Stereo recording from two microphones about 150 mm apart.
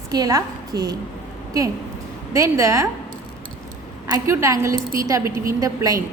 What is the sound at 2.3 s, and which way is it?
Speech, 20° right (ahead or behind).